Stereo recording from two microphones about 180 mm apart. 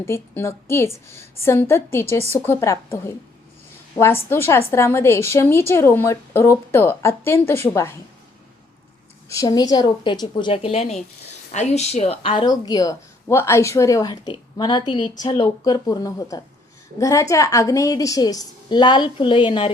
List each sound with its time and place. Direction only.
0.0 s a woman's voice: 15° left (ahead or behind)
9.3 s speech: 20° left (ahead or behind)